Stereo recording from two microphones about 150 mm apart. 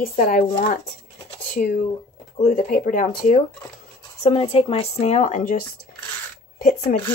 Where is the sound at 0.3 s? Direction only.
65° left (ahead or behind).